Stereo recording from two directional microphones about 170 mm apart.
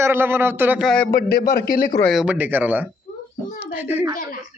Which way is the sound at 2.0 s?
5° right (ahead or behind).